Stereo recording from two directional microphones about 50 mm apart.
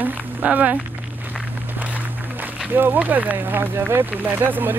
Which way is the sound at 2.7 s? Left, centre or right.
Right.